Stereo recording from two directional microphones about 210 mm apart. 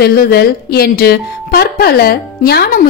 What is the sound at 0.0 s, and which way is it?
A woman's voice, 45° left (ahead or behind).